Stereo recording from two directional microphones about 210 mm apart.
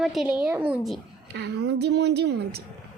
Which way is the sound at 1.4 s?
55° right (ahead or behind).